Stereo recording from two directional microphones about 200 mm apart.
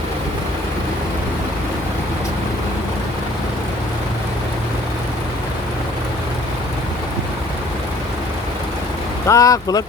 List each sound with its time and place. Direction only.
9.2 s speech: 15° left (ahead or behind)